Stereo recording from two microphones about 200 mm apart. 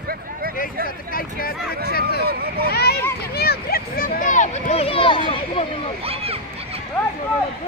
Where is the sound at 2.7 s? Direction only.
50° left (ahead or behind); by 5.9 s 30° left (ahead or behind).